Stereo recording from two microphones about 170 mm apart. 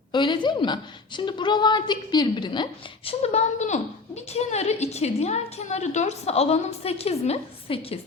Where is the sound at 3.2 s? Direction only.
40° left (ahead or behind).